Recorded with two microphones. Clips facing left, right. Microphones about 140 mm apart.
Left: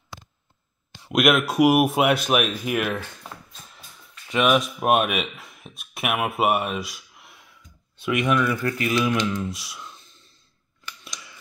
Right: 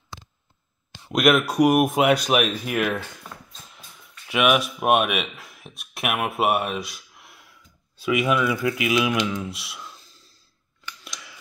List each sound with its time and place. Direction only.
1.0 s speech: centre (ahead or behind)
4.3 s speech: 5° right (ahead or behind)
10.0 s a sound: 35° right (ahead or behind)
11.1 s scissors: centre (ahead or behind)